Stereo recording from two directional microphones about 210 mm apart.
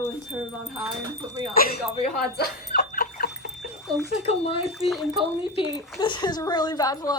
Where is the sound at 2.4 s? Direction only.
45° left (ahead or behind).